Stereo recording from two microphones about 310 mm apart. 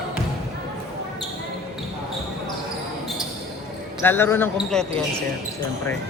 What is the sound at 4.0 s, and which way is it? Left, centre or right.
Speech, centre.